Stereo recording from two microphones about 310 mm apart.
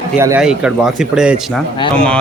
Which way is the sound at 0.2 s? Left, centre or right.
Centre.